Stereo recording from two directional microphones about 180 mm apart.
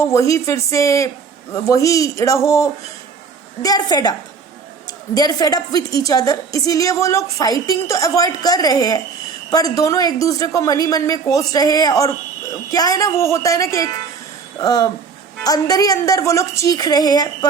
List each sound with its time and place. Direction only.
0.0 s a woman's voice: 15° left (ahead or behind)
5.1 s a woman's voice: 20° left (ahead or behind)